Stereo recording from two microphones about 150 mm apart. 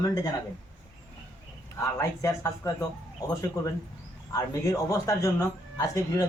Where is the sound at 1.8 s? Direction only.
20° left (ahead or behind).